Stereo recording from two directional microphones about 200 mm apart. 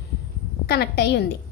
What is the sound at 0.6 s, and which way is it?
Speech, 55° left (ahead or behind).